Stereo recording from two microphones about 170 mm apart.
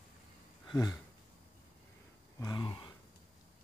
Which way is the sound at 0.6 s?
25° left (ahead or behind).